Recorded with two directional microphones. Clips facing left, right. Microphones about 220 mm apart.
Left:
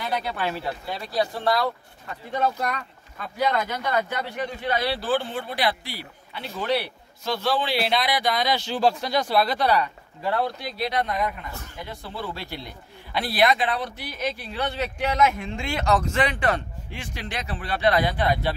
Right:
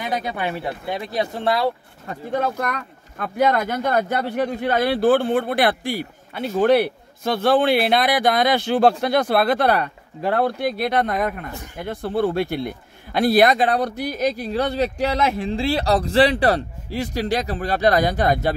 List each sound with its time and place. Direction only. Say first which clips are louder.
0.0 s speech: right 3 dB; 15° right (ahead or behind)
2.3 s a man's voice: right 2 dB; 50° right (ahead or behind)